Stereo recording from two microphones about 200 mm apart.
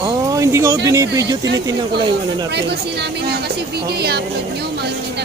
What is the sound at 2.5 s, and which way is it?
A woman's voice, 60° right (ahead or behind).